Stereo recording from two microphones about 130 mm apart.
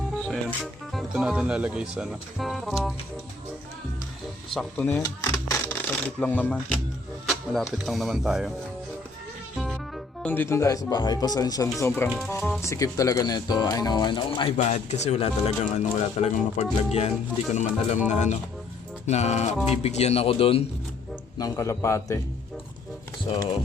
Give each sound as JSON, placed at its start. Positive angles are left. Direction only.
{"t": 0.2, "sound": "speech", "side_deg": 0}
{"t": 4.5, "sound": "speech", "side_deg": 10}
{"t": 5.0, "sound": "a sound", "side_deg": 25}
{"t": 5.6, "sound": "speech", "side_deg": 15}
{"t": 7.8, "sound": "speech", "side_deg": 0}
{"t": 9.6, "sound": "music", "side_deg": 0}
{"t": 10.2, "sound": "speech", "side_deg": 15}
{"t": 12.4, "sound": "speech", "side_deg": 0}
{"t": 12.6, "sound": "speech", "side_deg": 25}
{"t": 14.6, "sound": "speech", "side_deg": 60}
{"t": 21.3, "sound": "speech", "side_deg": 25}